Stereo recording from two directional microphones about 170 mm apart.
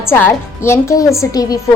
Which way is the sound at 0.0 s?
15° left (ahead or behind).